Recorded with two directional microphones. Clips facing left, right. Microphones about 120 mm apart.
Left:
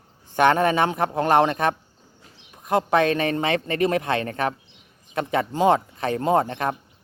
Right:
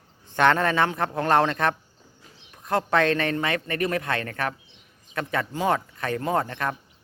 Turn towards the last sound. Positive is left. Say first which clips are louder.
# left 5 dB
turn(degrees=25)  # may be behind; listen again after turning